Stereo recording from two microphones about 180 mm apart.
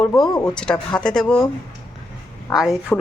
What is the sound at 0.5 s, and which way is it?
Speech, 5° left (ahead or behind).